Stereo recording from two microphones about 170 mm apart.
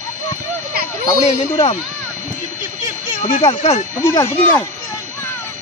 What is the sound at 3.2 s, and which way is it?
Speech, 50° left (ahead or behind).